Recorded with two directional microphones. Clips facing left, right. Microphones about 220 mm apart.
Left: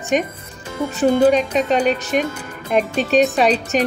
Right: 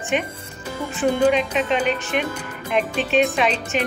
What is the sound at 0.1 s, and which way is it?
Speech, 40° left (ahead or behind).